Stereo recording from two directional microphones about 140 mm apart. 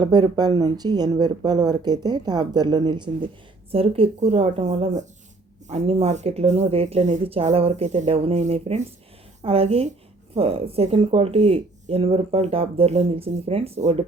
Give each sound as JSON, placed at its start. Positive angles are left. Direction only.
{"t": 0.0, "sound": "speech", "side_deg": -30}